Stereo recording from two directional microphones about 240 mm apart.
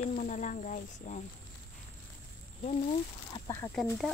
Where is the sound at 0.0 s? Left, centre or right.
Left.